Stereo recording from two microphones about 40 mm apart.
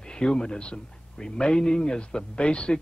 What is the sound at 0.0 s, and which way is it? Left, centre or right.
Speech, left.